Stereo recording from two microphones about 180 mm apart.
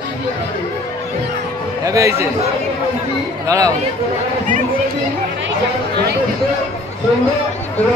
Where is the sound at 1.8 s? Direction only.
15° right (ahead or behind).